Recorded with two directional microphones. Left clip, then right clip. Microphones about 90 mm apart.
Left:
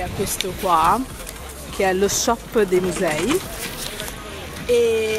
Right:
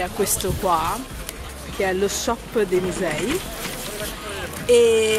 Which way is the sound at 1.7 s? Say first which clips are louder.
Left 3 dB; 40° left (ahead or behind).